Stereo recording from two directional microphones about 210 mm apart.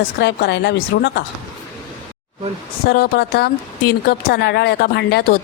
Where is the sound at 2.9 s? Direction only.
45° left (ahead or behind).